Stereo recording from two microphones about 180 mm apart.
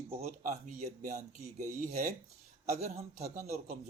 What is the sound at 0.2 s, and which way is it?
A man's voice, 40° right (ahead or behind).